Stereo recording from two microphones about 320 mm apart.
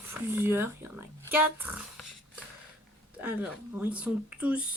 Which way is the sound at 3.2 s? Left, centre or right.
Centre.